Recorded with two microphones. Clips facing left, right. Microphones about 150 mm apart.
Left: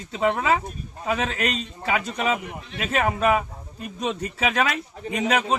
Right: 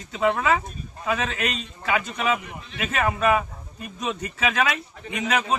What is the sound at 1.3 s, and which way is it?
Speech, 40° left (ahead or behind).